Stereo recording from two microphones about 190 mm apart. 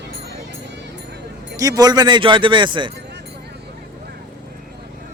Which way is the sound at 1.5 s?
15° right (ahead or behind).